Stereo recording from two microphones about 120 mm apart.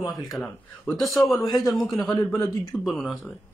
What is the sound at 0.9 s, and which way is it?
A man's voice, centre (ahead or behind).